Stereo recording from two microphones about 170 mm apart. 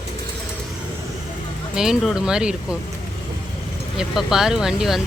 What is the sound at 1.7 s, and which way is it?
Speech, 5° right (ahead or behind).